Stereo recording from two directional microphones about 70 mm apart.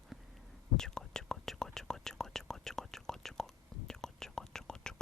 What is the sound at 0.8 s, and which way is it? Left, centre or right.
Whispering, centre.